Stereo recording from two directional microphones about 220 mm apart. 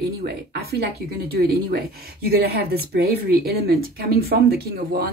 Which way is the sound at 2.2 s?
45° right (ahead or behind).